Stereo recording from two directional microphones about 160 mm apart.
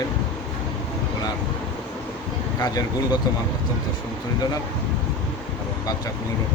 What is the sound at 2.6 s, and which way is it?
Speech, 25° left (ahead or behind).